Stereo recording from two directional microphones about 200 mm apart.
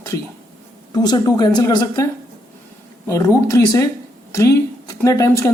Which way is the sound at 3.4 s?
15° left (ahead or behind).